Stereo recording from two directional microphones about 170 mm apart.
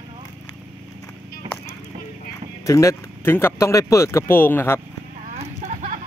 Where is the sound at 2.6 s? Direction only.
20° left (ahead or behind).